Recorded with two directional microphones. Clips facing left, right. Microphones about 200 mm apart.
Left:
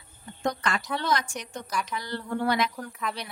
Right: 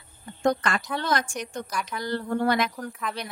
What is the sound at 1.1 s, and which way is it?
A woman's voice, 50° right (ahead or behind).